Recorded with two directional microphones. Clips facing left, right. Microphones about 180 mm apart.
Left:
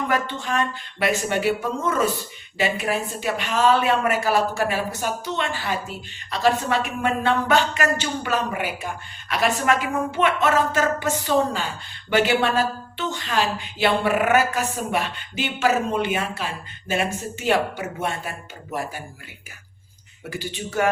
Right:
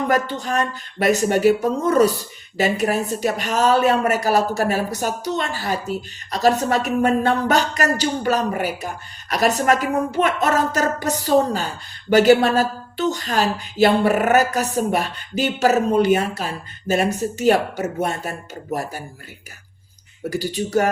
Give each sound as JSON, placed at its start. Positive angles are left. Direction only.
{"t": 0.1, "sound": "a woman's voice", "side_deg": -40}
{"t": 20.2, "sound": "a woman's voice", "side_deg": -40}